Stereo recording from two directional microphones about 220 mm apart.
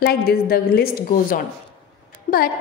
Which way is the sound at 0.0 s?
45° left (ahead or behind).